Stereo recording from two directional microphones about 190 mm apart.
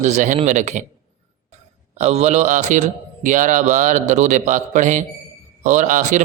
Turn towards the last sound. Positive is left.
turn(degrees=-40)  # may be behind; listen again after turning